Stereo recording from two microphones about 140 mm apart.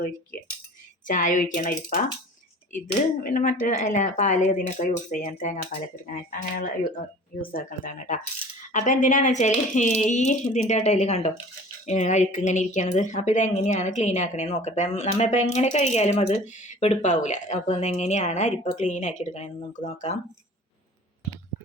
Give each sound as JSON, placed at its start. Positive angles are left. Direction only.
{"t": 0.3, "sound": "cutlery", "side_deg": 90}
{"t": 1.0, "sound": "a woman's voice", "side_deg": 70}
{"t": 7.4, "sound": "a woman's voice", "side_deg": 90}